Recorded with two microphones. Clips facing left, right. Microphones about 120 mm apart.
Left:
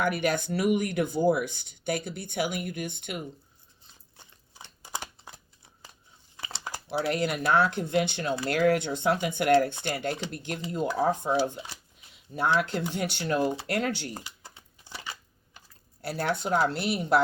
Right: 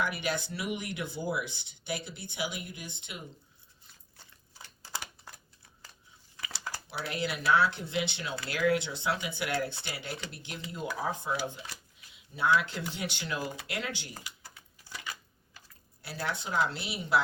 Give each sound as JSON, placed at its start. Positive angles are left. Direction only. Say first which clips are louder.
{"t": 0.0, "sound": "speech", "louder": "left 6 dB", "side_deg": 50}
{"t": 4.2, "sound": "a sound", "louder": "left 3 dB", "side_deg": 20}
{"t": 6.3, "sound": "crumpling", "louder": "left 2 dB", "side_deg": 25}
{"t": 6.8, "sound": "speech", "louder": "left 8 dB", "side_deg": 50}
{"t": 12.5, "sound": "speech", "louder": "left 4 dB", "side_deg": 45}
{"t": 14.1, "sound": "a sound", "louder": "left 6 dB", "side_deg": 25}
{"t": 16.0, "sound": "speech", "louder": "left 7 dB", "side_deg": 50}